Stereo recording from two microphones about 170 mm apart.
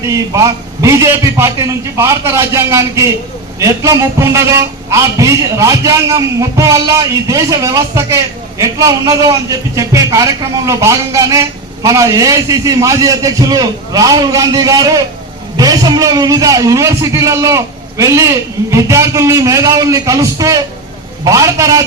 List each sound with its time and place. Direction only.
0.0 s a man's voice: 20° right (ahead or behind)